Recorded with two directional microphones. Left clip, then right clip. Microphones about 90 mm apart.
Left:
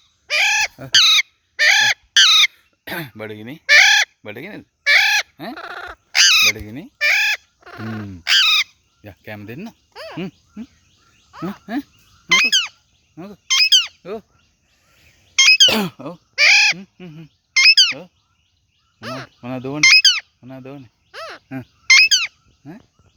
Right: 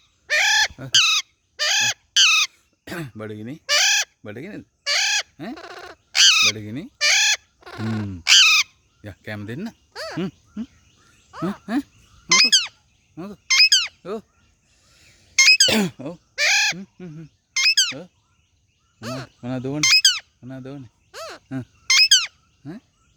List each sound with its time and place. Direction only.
0.3 s chicken: 35° right (ahead or behind)
0.9 s chicken: 15° right (ahead or behind)
6.1 s crow: 5° left (ahead or behind)
7.0 s fowl: 30° right (ahead or behind)
9.0 s speech: 25° right (ahead or behind); by 10.3 s 40° right (ahead or behind)
11.3 s speech: 15° right (ahead or behind)
12.3 s goose: 15° right (ahead or behind)
13.1 s a sound: 10° right (ahead or behind)
16.1 s crow: 10° right (ahead or behind)
16.8 s a sound: 15° right (ahead or behind)
22.6 s speech: 45° right (ahead or behind)